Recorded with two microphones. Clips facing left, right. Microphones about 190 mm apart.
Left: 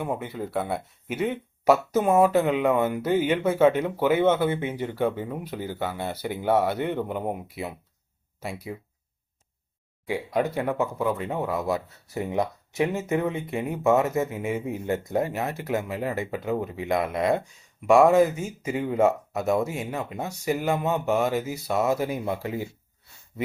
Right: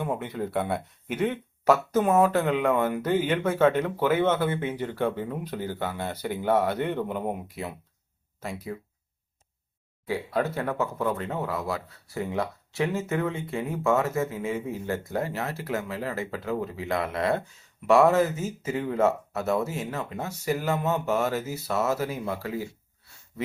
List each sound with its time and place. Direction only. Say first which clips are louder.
0.0 s speech: even; 5° left (ahead or behind)
10.1 s speech: left 2 dB; 15° left (ahead or behind)